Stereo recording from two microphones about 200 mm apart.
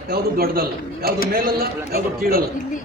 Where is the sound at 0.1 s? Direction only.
50° right (ahead or behind).